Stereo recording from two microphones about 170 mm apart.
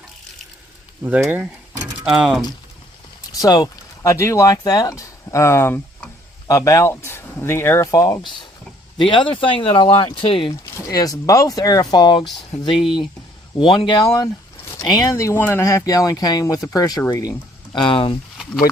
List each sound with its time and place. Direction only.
1.0 s speech: 10° right (ahead or behind)
3.4 s speech: 20° left (ahead or behind)
10.8 s speech: 20° left (ahead or behind)
12.7 s speech: centre (ahead or behind)
13.7 s speech: 30° left (ahead or behind)
17.7 s speech: 30° left (ahead or behind)